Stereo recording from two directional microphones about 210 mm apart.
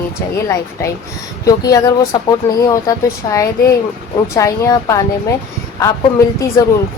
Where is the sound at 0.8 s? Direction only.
15° left (ahead or behind).